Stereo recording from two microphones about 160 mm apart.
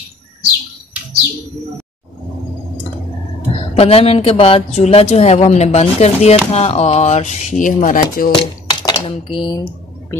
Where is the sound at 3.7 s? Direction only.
40° left (ahead or behind); by 8.3 s 55° left (ahead or behind).